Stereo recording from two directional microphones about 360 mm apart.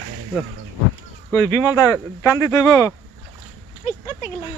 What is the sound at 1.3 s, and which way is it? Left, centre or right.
Speech, centre.